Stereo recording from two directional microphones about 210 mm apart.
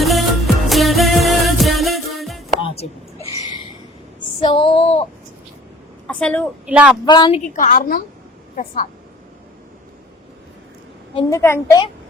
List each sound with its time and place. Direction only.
0.0 s music: centre (ahead or behind)
2.6 s a sound: 30° left (ahead or behind)
4.4 s female singing: 25° left (ahead or behind)
6.1 s a woman's voice: 5° left (ahead or behind)
6.7 s speech: 5° right (ahead or behind)
7.0 s speech: 20° left (ahead or behind)
7.5 s a woman's voice: 40° left (ahead or behind)
11.3 s a child's voice: 10° left (ahead or behind)